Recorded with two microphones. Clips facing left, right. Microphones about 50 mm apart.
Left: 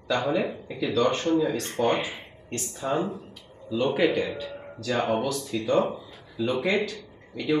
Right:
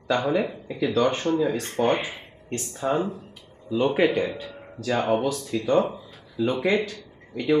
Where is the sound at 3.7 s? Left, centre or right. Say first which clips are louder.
Right 2 dB; centre.